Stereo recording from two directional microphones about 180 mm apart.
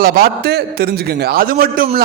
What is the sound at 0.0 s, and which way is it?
A man's voice, 60° right (ahead or behind).